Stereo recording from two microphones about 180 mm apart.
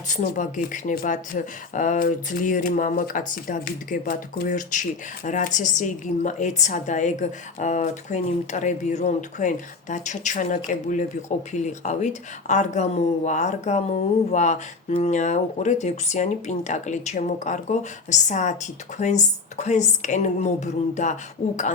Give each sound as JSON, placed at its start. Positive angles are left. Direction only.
{"t": 0.1, "sound": "speech", "side_deg": 45}